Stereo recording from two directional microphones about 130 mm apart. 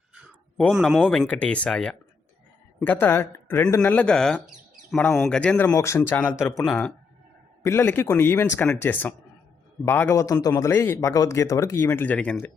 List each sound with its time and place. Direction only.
0.7 s speech: centre (ahead or behind)
5.7 s a man's voice: 20° left (ahead or behind)
6.6 s speech: 5° left (ahead or behind)
7.6 s a man's voice: 20° left (ahead or behind)
11.9 s speech: 15° left (ahead or behind)